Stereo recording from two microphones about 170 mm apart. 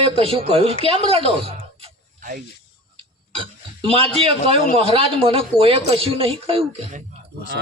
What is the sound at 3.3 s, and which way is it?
Speech, 30° right (ahead or behind).